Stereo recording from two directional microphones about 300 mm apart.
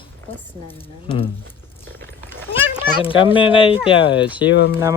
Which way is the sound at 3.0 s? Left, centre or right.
Centre.